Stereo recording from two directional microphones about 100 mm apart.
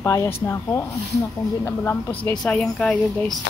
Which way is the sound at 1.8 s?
15° left (ahead or behind).